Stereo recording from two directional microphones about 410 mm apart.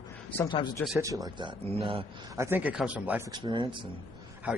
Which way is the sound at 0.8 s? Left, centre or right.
Centre.